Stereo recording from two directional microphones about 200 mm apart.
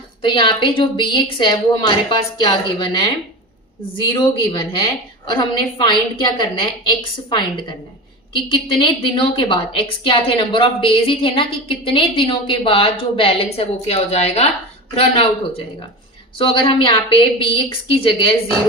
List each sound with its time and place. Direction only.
0.3 s a woman's voice: 25° left (ahead or behind)
8.4 s a woman's voice: 25° left (ahead or behind)